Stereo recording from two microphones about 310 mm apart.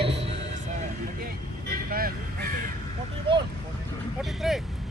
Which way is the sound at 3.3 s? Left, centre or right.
Centre.